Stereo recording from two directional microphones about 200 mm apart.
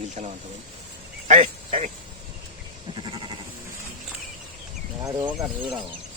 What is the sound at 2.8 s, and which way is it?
Sheep, 25° right (ahead or behind).